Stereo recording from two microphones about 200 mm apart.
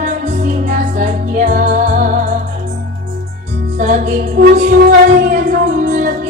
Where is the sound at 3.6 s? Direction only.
40° right (ahead or behind).